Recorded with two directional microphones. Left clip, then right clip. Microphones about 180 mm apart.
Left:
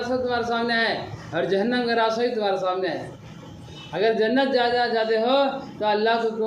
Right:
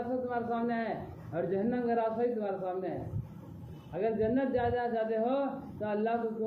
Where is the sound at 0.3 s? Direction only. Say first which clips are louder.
Left 10 dB; 15° left (ahead or behind).